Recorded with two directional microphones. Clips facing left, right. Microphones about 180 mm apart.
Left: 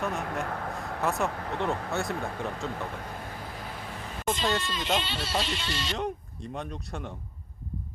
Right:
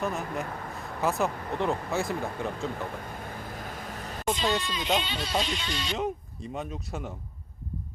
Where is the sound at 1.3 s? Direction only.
65° left (ahead or behind).